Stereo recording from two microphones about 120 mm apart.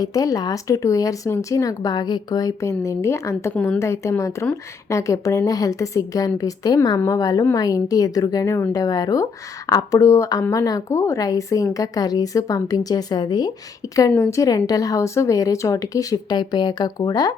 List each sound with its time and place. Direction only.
0.0 s speech: 30° left (ahead or behind)
3.5 s a woman's voice: 10° left (ahead or behind)
3.8 s a woman's voice: 25° left (ahead or behind)